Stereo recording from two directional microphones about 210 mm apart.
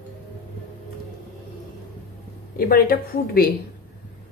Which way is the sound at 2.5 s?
45° left (ahead or behind).